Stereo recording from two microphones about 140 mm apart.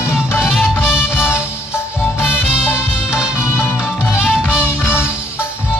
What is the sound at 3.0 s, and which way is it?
Music, 5° right (ahead or behind).